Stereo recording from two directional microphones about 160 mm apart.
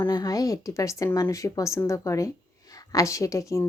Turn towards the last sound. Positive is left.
turn(degrees=20)  # may be behind; listen again after turning